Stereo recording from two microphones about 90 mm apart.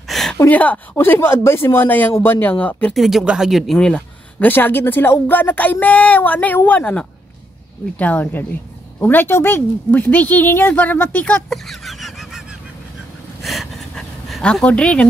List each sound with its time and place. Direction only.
0.1 s a sound: 5° left (ahead or behind)
0.5 s speech: 20° left (ahead or behind)
2.9 s speech: centre (ahead or behind)
3.7 s speech: 10° left (ahead or behind)
11.4 s fowl: centre (ahead or behind)
13.4 s a sound: centre (ahead or behind)